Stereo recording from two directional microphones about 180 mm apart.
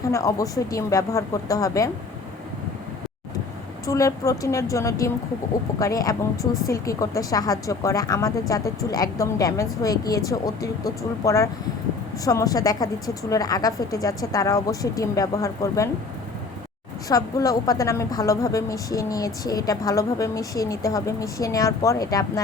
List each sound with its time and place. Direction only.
0.1 s a woman's voice: 20° left (ahead or behind)
3.8 s a woman's voice: 20° left (ahead or behind)
17.1 s a woman's voice: 20° left (ahead or behind)